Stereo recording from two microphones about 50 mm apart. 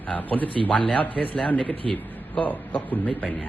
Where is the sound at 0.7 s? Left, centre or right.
Centre.